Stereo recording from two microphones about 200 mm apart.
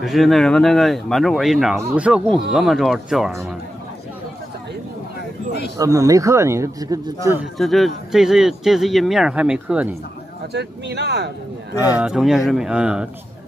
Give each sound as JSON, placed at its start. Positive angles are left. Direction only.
{"t": 0.0, "sound": "speech", "side_deg": 0}
{"t": 5.8, "sound": "speech", "side_deg": -15}
{"t": 7.5, "sound": "speech", "side_deg": 0}
{"t": 10.5, "sound": "speech", "side_deg": -60}
{"t": 11.8, "sound": "speech", "side_deg": -5}